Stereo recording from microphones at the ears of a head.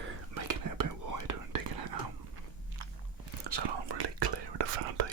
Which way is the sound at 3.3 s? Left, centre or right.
Right.